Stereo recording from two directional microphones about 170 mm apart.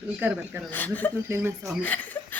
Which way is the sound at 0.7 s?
10° left (ahead or behind).